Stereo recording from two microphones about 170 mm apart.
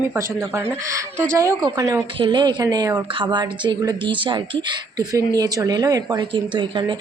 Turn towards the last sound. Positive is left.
turn(degrees=-30)  # may be behind; listen again after turning